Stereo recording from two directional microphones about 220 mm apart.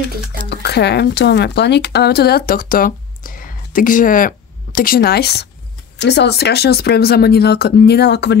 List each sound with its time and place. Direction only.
0.5 s speech: 50° left (ahead or behind)